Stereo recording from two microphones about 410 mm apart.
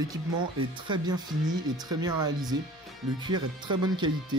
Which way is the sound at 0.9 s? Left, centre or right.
Centre.